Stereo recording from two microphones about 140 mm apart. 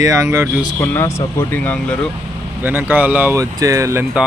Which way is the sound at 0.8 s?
15° left (ahead or behind).